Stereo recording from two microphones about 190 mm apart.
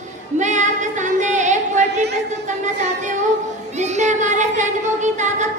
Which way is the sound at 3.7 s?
35° right (ahead or behind).